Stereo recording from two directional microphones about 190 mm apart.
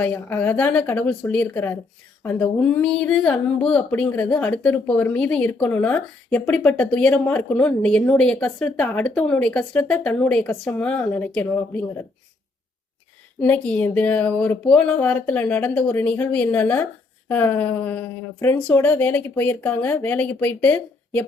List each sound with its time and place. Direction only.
0.0 s speech: 10° left (ahead or behind)
13.4 s speech: 10° left (ahead or behind)